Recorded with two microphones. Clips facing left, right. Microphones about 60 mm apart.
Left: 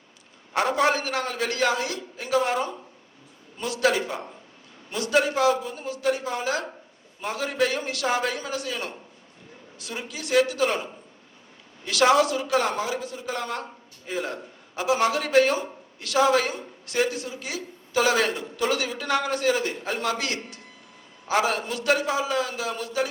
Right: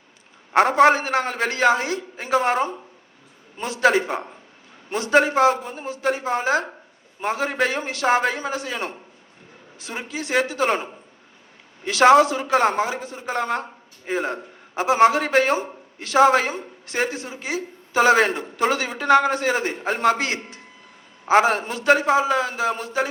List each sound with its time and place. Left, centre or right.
0.5 s a man's voice: right